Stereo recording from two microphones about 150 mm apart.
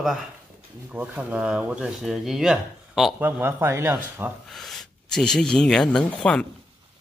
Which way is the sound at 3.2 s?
15° right (ahead or behind).